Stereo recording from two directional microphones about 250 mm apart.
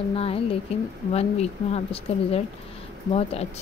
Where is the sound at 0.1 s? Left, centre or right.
Left.